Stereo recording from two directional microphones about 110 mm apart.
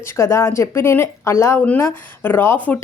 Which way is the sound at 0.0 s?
25° left (ahead or behind).